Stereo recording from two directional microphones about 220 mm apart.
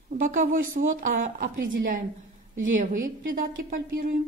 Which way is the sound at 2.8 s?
35° right (ahead or behind).